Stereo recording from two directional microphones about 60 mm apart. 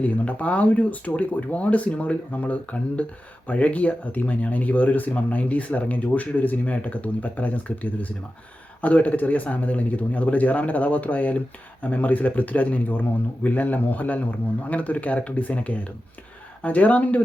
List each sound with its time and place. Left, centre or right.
0.0 s speech: left